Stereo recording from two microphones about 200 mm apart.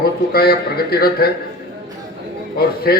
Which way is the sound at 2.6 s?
50° left (ahead or behind).